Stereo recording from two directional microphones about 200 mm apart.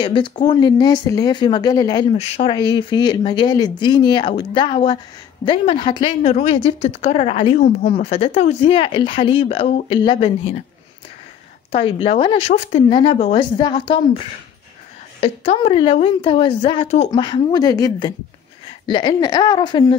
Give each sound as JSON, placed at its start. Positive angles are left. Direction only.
{"t": 0.0, "sound": "speech", "side_deg": 25}
{"t": 2.1, "sound": "speech", "side_deg": 30}
{"t": 11.7, "sound": "speech", "side_deg": 25}
{"t": 17.1, "sound": "speech", "side_deg": 20}